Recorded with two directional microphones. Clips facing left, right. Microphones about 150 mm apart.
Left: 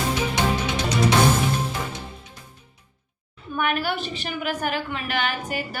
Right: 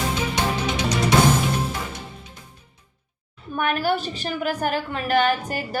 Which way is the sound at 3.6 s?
40° right (ahead or behind).